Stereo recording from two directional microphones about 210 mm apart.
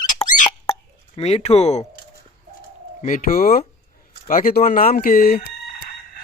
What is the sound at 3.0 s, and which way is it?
Speech, 40° left (ahead or behind).